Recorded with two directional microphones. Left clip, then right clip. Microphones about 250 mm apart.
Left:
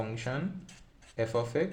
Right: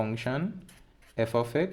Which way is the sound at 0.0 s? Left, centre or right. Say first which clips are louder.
Right 4 dB; right.